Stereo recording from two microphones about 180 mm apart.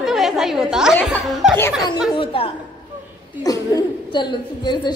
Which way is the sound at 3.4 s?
20° left (ahead or behind).